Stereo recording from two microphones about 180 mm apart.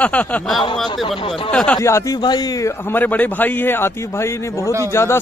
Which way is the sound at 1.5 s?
5° left (ahead or behind).